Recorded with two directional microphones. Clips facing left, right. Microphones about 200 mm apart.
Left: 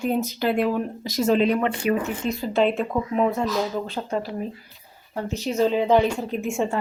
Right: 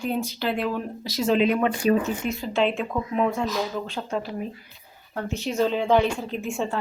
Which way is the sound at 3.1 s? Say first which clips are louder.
Left 2 dB; 5° left (ahead or behind).